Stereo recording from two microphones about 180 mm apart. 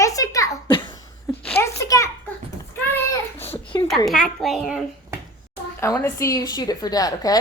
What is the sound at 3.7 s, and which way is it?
Speech, 20° left (ahead or behind).